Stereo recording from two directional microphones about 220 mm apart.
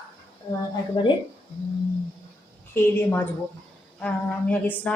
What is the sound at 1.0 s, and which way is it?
Speech, 25° left (ahead or behind).